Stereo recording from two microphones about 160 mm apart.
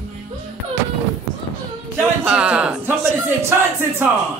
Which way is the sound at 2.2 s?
5° right (ahead or behind).